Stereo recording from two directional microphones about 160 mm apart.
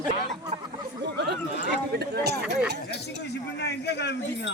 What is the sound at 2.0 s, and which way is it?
Speech, 90° right.